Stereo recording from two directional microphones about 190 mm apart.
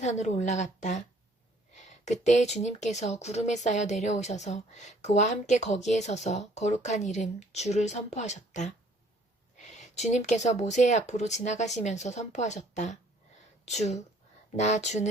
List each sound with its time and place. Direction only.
0.0 s speech: 35° left (ahead or behind)